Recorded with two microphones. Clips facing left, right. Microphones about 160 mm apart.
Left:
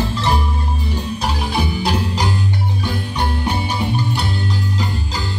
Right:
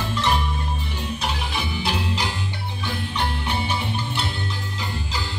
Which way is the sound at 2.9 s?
40° left (ahead or behind).